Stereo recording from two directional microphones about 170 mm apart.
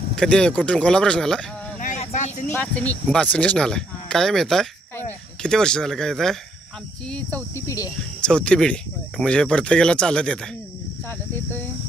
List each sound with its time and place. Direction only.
0.1 s speech: 5° left (ahead or behind)
1.8 s vehicle: 45° left (ahead or behind)
2.5 s speech: 10° left (ahead or behind)
7.6 s speech: 20° left (ahead or behind)
8.2 s speech: 5° left (ahead or behind)